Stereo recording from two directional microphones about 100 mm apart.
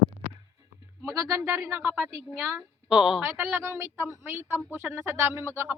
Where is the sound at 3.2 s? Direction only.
25° right (ahead or behind).